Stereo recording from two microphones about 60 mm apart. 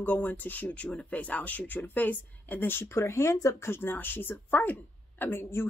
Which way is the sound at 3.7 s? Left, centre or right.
Left.